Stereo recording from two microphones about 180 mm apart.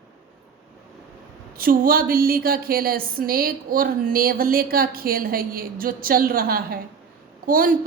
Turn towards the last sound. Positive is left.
turn(degrees=-50)  # may be behind; listen again after turning